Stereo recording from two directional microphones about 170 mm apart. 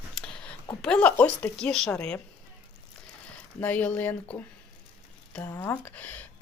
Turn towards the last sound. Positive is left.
turn(degrees=10)  # may be behind; listen again after turning